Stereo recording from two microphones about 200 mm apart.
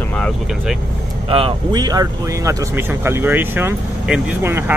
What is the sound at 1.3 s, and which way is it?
Speech, 25° right (ahead or behind).